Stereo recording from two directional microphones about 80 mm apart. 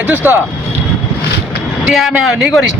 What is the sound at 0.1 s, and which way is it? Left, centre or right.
Speech, right.